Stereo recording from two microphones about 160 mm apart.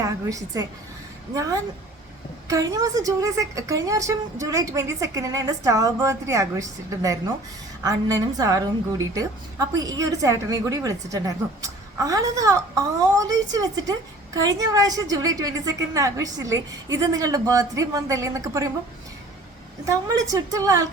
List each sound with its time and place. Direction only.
0.0 s a woman's voice: 20° right (ahead or behind)
19.8 s a woman's voice: 20° right (ahead or behind)